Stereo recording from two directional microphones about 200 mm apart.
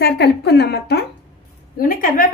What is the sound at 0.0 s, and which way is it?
A woman's voice, 55° left (ahead or behind).